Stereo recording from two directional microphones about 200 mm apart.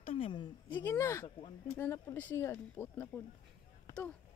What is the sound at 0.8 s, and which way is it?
Speech, 15° left (ahead or behind).